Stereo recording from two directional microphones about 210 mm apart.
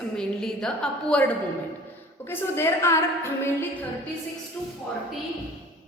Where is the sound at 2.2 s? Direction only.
10° left (ahead or behind).